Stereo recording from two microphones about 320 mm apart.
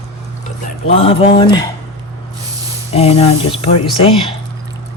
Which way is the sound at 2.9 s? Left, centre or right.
Centre.